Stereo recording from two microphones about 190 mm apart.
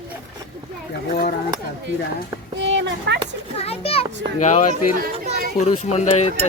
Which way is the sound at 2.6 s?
70° right (ahead or behind).